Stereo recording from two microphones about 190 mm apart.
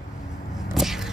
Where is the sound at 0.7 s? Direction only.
Centre (ahead or behind).